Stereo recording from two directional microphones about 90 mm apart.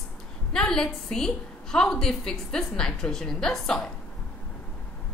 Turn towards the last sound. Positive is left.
turn(degrees=5)  # may be behind; listen again after turning